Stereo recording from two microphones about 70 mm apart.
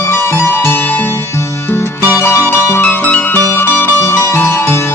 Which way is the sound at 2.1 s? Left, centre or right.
Left.